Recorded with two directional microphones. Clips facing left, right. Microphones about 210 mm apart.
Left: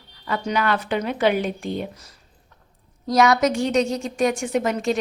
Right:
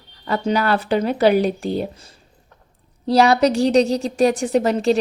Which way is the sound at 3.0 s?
30° right (ahead or behind).